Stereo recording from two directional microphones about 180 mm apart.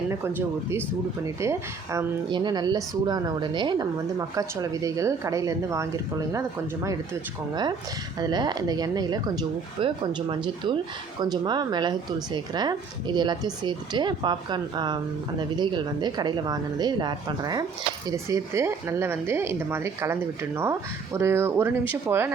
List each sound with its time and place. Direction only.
0.1 s a woman's voice: 15° right (ahead or behind)